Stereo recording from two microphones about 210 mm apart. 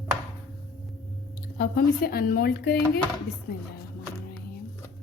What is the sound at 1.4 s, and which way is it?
Speech, 45° left (ahead or behind).